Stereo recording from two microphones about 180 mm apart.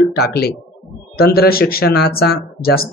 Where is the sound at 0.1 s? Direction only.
60° left (ahead or behind).